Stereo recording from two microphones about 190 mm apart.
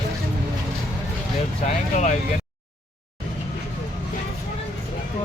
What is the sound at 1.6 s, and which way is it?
Speech, 40° left (ahead or behind).